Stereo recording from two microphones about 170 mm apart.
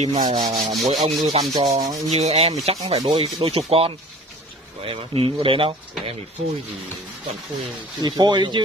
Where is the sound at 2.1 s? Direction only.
40° right (ahead or behind).